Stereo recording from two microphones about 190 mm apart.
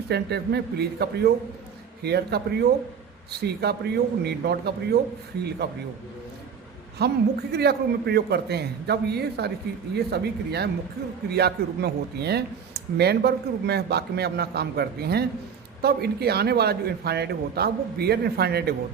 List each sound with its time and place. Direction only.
0.1 s speech: 60° right (ahead or behind)
7.0 s speech: 60° right (ahead or behind)